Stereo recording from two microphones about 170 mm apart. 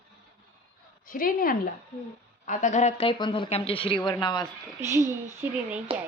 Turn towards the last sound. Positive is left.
turn(degrees=-15)  # may be behind; listen again after turning